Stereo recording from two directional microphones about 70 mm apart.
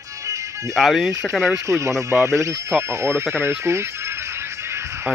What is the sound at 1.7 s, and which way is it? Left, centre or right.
Speech, right.